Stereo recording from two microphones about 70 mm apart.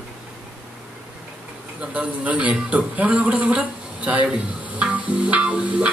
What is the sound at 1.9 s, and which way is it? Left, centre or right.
A man's voice, centre.